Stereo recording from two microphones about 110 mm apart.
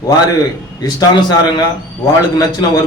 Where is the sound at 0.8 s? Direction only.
40° left (ahead or behind).